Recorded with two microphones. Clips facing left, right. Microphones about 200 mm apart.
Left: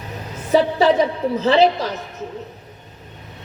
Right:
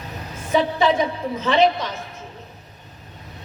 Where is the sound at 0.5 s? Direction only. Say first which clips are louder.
Left 4 dB; 35° left (ahead or behind).